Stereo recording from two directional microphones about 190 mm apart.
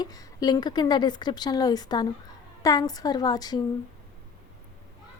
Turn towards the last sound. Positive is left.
turn(degrees=20)  # may be behind; listen again after turning